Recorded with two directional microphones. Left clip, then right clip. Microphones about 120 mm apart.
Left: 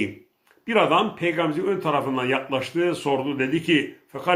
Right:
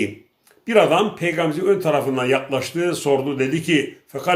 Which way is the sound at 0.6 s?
25° right (ahead or behind).